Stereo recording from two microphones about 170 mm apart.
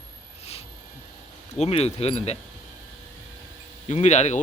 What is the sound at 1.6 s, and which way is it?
Speech, 35° left (ahead or behind).